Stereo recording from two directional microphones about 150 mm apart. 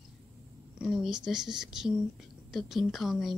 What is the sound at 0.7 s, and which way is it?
Speech, 5° right (ahead or behind).